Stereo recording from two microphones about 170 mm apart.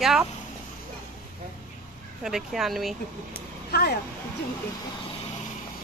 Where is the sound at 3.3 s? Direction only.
70° left (ahead or behind).